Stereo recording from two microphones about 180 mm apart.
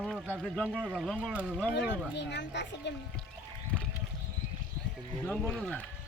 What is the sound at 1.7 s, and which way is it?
Speech, 75° left (ahead or behind).